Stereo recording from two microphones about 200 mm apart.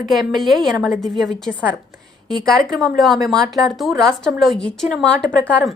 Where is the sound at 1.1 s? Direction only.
Centre (ahead or behind).